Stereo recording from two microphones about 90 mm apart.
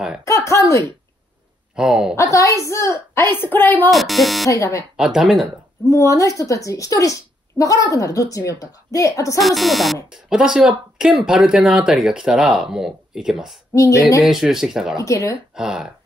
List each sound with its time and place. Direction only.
0.2 s speech: 30° left (ahead or behind)
1.8 s speech: 5° right (ahead or behind)
2.1 s a woman's voice: 35° left (ahead or behind)
3.9 s speech: centre (ahead or behind)
4.5 s a woman's voice: 35° left (ahead or behind)
4.9 s speech: 5° right (ahead or behind)
5.9 s a woman's voice: 35° left (ahead or behind)
9.4 s speech: centre (ahead or behind)